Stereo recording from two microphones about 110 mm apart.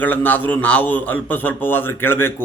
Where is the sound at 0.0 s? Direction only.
15° left (ahead or behind).